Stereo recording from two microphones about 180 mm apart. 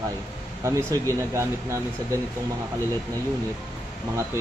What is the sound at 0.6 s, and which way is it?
Speech, 15° right (ahead or behind).